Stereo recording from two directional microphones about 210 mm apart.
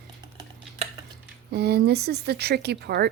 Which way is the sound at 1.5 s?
50° right (ahead or behind).